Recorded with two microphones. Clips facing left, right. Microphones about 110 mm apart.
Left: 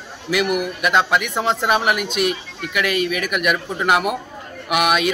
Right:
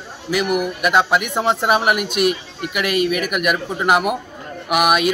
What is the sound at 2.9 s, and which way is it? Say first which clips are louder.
Speech: right 4 dB; 55° right (ahead or behind).